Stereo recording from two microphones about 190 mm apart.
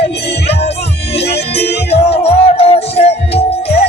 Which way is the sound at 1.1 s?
30° left (ahead or behind).